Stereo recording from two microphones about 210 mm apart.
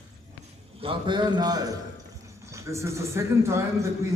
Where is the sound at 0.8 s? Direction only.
25° right (ahead or behind).